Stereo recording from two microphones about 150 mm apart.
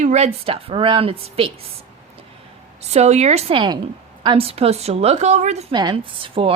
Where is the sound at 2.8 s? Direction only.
45° right (ahead or behind).